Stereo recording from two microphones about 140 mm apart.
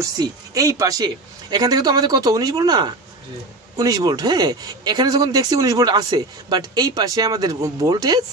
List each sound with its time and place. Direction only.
0.0 s speech: 25° right (ahead or behind)